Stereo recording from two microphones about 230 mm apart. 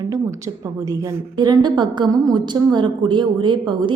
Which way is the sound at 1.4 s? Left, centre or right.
Centre.